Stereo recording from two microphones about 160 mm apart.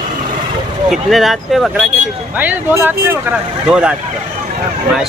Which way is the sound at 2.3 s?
10° right (ahead or behind).